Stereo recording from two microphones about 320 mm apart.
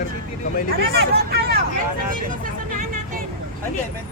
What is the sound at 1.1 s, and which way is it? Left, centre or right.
Speech, right.